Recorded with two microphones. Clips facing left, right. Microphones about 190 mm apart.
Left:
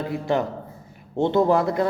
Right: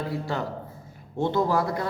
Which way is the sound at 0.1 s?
20° left (ahead or behind).